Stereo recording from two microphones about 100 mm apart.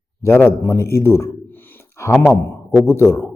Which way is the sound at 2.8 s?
25° left (ahead or behind).